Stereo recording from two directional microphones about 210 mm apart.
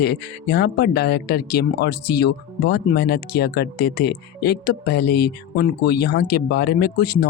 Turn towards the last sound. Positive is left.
turn(degrees=50)  # may be behind; listen again after turning